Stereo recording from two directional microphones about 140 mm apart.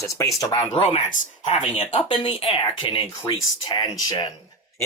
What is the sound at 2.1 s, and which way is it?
Speech, 40° left (ahead or behind).